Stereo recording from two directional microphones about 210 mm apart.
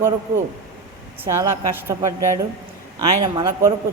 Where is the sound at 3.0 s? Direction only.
20° right (ahead or behind).